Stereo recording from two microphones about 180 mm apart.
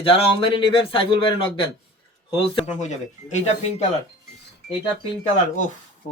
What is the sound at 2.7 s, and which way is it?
Speech, 40° left (ahead or behind).